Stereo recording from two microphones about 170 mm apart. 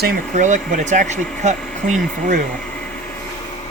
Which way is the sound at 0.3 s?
45° right (ahead or behind).